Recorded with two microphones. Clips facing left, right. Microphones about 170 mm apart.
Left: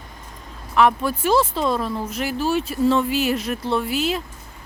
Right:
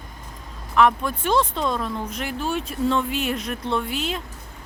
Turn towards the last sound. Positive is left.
turn(degrees=5)  # may be behind; listen again after turning